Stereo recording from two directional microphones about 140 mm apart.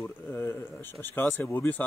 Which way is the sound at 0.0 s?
15° left (ahead or behind).